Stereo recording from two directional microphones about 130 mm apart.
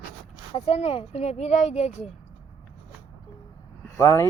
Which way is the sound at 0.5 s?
50° left (ahead or behind).